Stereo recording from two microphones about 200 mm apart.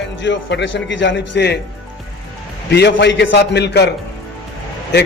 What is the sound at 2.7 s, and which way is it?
A man's voice, 60° left (ahead or behind).